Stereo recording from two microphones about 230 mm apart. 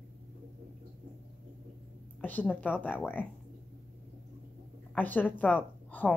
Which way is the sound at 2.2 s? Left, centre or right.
Centre.